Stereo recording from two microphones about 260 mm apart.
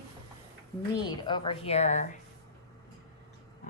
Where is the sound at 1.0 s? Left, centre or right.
Centre.